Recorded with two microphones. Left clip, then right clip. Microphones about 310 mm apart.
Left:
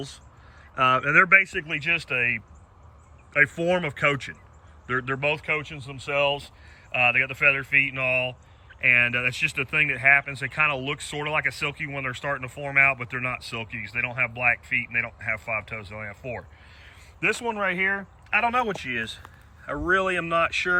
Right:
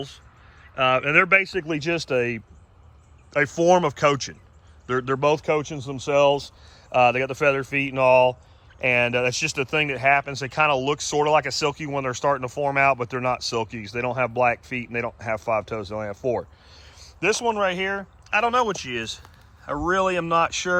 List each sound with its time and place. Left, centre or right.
1.0 s speech: centre
3.3 s speech: centre